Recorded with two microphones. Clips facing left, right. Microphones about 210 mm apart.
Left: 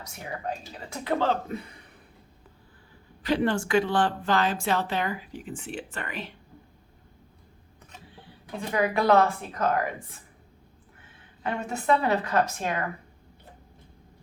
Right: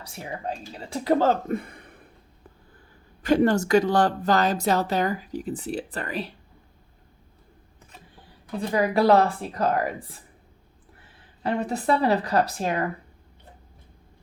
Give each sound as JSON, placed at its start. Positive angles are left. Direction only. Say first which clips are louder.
{"t": 0.0, "sound": "speech", "louder": "right 2 dB", "side_deg": -30}
{"t": 3.2, "sound": "speech", "louder": "right 5 dB", "side_deg": -45}
{"t": 8.7, "sound": "speech", "louder": "right 3 dB", "side_deg": -35}
{"t": 11.4, "sound": "speech", "louder": "right 2 dB", "side_deg": -35}